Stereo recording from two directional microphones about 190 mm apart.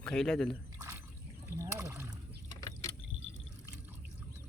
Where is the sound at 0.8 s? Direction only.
15° right (ahead or behind).